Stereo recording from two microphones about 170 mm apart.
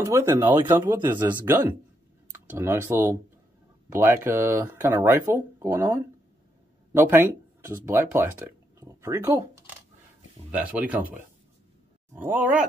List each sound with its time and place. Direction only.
0.0 s speech: 15° right (ahead or behind)
10.5 s speech: 10° right (ahead or behind)